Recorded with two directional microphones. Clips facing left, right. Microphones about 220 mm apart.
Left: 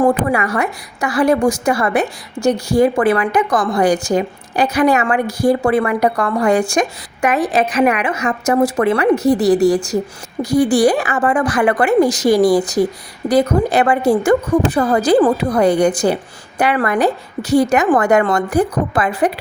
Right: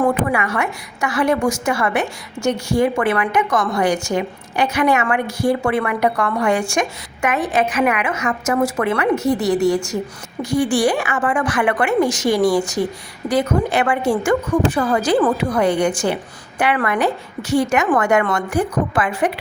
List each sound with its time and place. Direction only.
0.0 s a woman's voice: 35° left (ahead or behind)